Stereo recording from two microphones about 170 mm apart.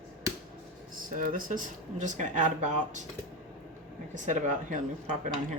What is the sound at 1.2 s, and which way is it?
Speech, 50° right (ahead or behind).